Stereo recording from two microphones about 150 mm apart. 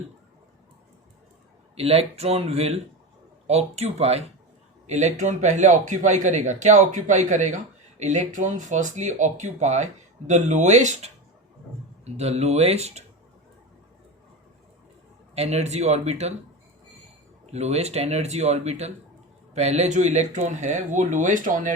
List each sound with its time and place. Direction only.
1.7 s a man's voice: 40° right (ahead or behind)
15.4 s a man's voice: 45° right (ahead or behind)
17.4 s a man's voice: 45° right (ahead or behind)